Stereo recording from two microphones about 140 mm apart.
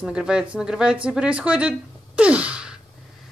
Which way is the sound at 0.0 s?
5° right (ahead or behind).